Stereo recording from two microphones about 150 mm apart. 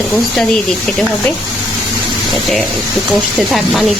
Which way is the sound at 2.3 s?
Centre (ahead or behind).